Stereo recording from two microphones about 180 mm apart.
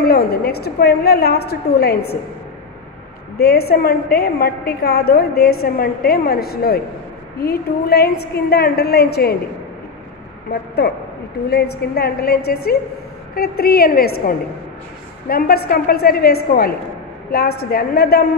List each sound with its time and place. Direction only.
0.0 s a woman's voice: 60° left (ahead or behind)
3.3 s a woman's voice: 60° left (ahead or behind)
10.8 s a woman's voice: 65° left (ahead or behind)